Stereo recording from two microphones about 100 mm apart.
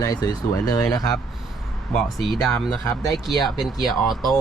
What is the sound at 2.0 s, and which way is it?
Speech, centre (ahead or behind).